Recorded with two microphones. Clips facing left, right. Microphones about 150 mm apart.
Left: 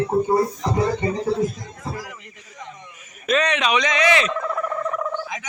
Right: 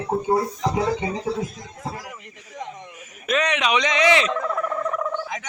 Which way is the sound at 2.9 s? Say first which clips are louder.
Left 2 dB; 10° right (ahead or behind).